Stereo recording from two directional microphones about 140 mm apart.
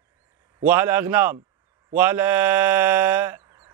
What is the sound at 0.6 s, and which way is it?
A man's voice, 15° right (ahead or behind).